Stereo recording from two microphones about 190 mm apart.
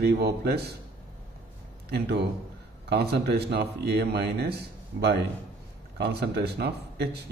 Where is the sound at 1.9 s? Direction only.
60° right (ahead or behind).